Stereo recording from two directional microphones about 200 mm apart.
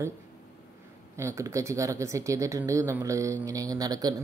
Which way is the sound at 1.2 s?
15° right (ahead or behind).